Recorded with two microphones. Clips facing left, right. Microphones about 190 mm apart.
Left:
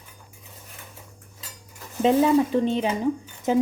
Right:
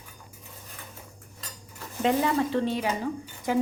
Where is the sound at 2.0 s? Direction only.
15° left (ahead or behind).